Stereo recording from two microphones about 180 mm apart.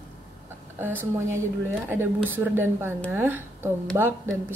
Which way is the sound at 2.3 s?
10° right (ahead or behind).